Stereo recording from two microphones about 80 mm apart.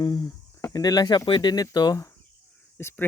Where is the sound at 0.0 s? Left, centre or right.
Left.